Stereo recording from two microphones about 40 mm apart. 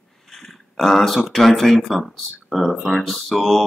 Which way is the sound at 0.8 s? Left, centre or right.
Centre.